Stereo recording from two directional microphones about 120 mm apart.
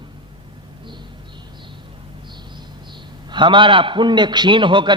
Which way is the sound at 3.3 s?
40° right (ahead or behind).